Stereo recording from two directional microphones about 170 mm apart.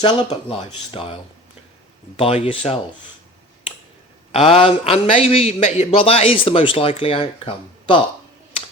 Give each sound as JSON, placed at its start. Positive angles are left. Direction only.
{"t": 0.0, "sound": "a man's voice", "side_deg": 25}
{"t": 4.4, "sound": "a man's voice", "side_deg": 35}